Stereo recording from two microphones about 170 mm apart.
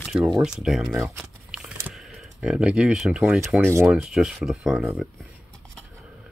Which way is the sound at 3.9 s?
5° right (ahead or behind).